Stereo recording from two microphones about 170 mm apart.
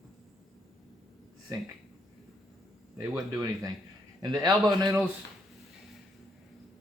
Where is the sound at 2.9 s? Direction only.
20° right (ahead or behind).